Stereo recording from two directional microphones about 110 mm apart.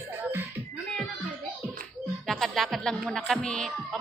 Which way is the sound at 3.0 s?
5° left (ahead or behind).